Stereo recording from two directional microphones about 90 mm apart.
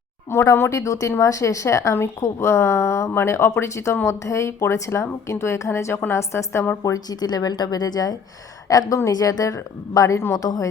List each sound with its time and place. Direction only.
0.3 s a woman's voice: 30° left (ahead or behind)
6.8 s a woman's voice: 45° left (ahead or behind)